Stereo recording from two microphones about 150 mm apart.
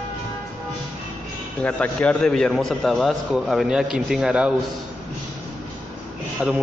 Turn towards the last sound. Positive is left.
turn(degrees=-5)  # may be behind; listen again after turning